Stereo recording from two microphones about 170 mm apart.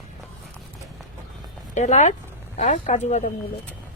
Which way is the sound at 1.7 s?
45° left (ahead or behind).